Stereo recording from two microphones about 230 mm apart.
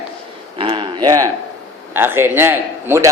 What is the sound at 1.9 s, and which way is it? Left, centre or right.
A man's voice, centre.